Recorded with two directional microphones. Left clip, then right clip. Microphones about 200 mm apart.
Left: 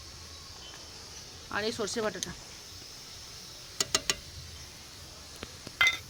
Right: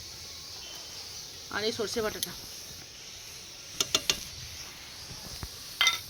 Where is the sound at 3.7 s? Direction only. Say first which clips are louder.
Right 2 dB; 5° left (ahead or behind).